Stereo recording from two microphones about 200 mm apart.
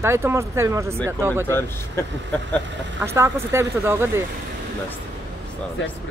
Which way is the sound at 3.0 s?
15° right (ahead or behind).